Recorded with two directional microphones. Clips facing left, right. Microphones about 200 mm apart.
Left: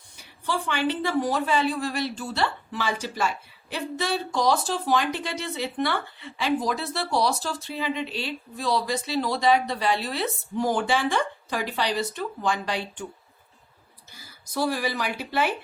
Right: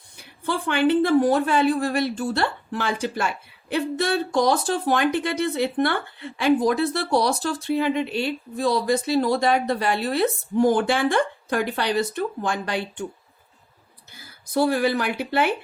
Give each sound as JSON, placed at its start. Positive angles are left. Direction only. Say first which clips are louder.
{"t": 0.4, "sound": "a woman's voice", "louder": "right 5 dB", "side_deg": -55}
{"t": 14.1, "sound": "a woman's voice", "louder": "right 8 dB", "side_deg": -55}